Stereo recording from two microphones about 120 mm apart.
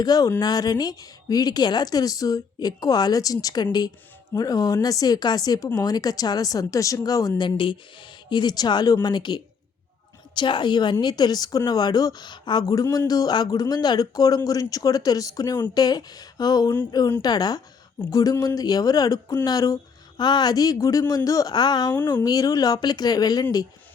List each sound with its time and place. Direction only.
0.0 s a woman's voice: 30° left (ahead or behind)